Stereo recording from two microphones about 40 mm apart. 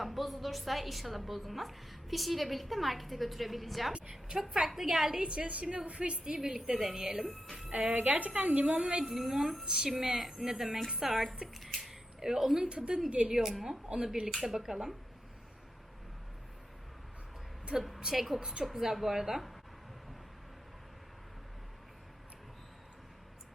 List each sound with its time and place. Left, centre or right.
0.0 s a woman's voice: centre
4.1 s a woman's voice: centre
5.2 s a woman's voice: right
6.2 s a woman's voice: centre
7.7 s a woman's voice: right
9.1 s a woman's voice: centre
9.6 s a woman's voice: centre
10.2 s a woman's voice: centre
11.5 s a sound: centre
12.6 s a woman's voice: right
13.3 s a woman's voice: centre
13.9 s a woman's voice: centre
18.0 s a woman's voice: centre